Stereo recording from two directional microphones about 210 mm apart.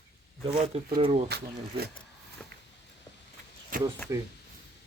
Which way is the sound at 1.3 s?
50° right (ahead or behind).